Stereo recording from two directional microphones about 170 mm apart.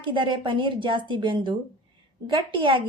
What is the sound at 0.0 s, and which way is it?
A woman's voice, 30° right (ahead or behind).